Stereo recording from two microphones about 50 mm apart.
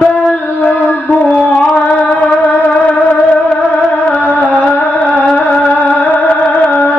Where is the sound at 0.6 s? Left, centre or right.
Left.